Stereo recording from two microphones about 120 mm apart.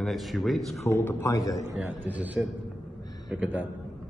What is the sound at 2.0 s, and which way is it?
Speech, 15° right (ahead or behind).